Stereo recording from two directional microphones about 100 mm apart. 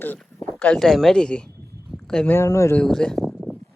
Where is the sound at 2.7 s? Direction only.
5° left (ahead or behind).